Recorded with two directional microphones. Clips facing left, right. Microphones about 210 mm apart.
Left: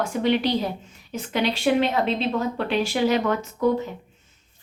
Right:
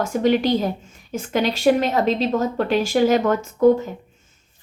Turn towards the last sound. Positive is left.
turn(degrees=-45)  # may be behind; listen again after turning